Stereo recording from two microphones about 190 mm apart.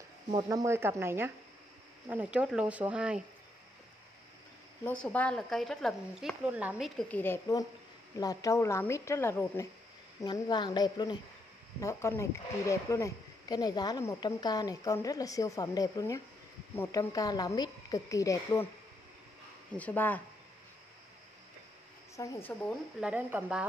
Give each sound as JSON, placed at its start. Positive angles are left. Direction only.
{"t": 0.3, "sound": "a woman's voice", "side_deg": -20}
{"t": 4.8, "sound": "a woman's voice", "side_deg": 5}
{"t": 19.7, "sound": "speech", "side_deg": 10}
{"t": 22.2, "sound": "speech", "side_deg": 15}
{"t": 22.5, "sound": "a woman's voice", "side_deg": 5}
{"t": 23.0, "sound": "speech", "side_deg": -5}